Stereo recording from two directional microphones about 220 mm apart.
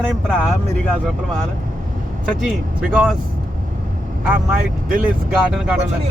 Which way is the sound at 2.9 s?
5° right (ahead or behind).